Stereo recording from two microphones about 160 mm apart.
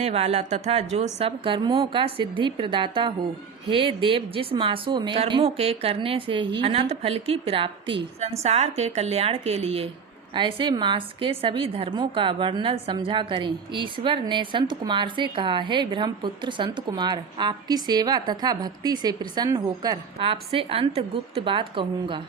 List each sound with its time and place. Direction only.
0.0 s a woman's voice: 40° right (ahead or behind); by 20.0 s 25° right (ahead or behind)
20.1 s speech: 35° right (ahead or behind)